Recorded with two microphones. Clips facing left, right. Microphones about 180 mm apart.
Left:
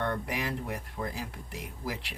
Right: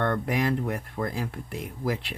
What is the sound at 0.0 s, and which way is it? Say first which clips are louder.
Speech: right 7 dB; 60° right (ahead or behind).